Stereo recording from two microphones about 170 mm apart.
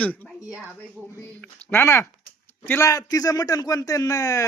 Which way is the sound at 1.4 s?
15° left (ahead or behind).